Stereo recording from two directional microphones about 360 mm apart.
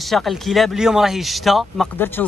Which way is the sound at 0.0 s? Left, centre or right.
Centre.